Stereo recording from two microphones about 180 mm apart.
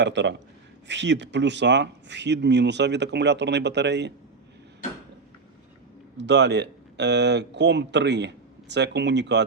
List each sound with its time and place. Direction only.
0.0 s speech: 80° right
6.1 s speech: 75° right (ahead or behind)